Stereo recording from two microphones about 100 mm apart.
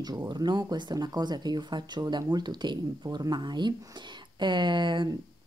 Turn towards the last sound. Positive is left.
turn(degrees=-50)  # may be behind; listen again after turning